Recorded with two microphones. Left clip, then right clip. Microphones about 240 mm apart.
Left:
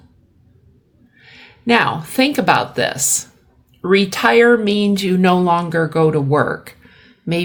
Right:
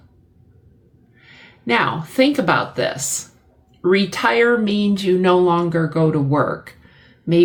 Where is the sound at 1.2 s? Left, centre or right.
Left.